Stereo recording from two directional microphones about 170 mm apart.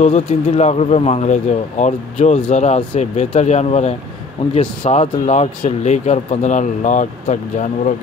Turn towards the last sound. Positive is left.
turn(degrees=45)  # may be behind; listen again after turning